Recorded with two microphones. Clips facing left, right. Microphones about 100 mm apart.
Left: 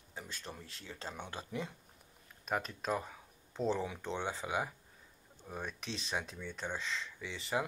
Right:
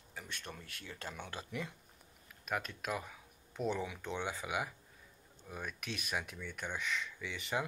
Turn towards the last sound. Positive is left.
turn(degrees=25)  # may be behind; listen again after turning